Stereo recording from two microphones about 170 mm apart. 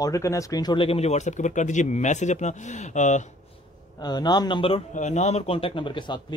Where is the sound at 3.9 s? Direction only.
25° left (ahead or behind).